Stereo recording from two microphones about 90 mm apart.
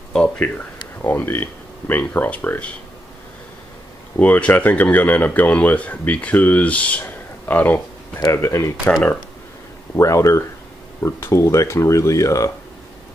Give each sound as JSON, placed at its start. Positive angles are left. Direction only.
{"t": 1.0, "sound": "speech", "side_deg": 20}
{"t": 4.2, "sound": "speech", "side_deg": 20}
{"t": 8.4, "sound": "speech", "side_deg": 35}
{"t": 9.9, "sound": "speech", "side_deg": 35}